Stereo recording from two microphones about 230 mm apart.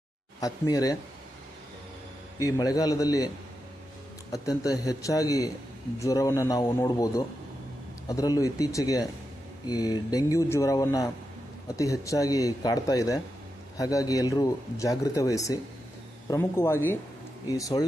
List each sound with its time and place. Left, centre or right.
0.3 s speech: centre
2.4 s speech: centre
4.3 s speech: centre